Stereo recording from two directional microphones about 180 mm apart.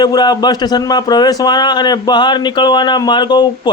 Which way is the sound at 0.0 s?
20° left (ahead or behind).